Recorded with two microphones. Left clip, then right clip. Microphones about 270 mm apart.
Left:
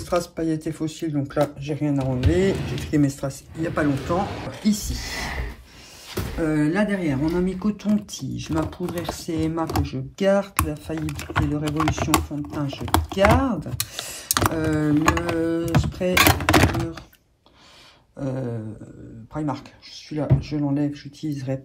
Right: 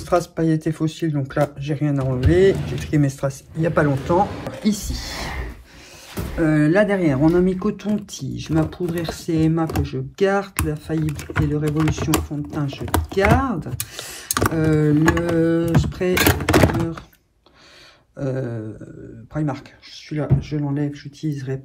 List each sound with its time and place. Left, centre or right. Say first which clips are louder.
0.0 s speech: right 4 dB; centre
20.1 s speech: right 1 dB; centre